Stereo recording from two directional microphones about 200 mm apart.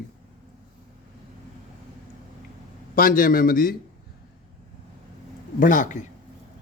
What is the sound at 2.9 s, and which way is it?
Speech, 45° left (ahead or behind).